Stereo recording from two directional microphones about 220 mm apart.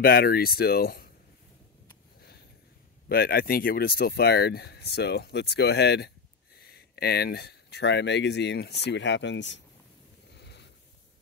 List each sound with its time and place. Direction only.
0.0 s speech: 45° left (ahead or behind)
3.1 s speech: 45° left (ahead or behind)
10.4 s a sound: 50° left (ahead or behind)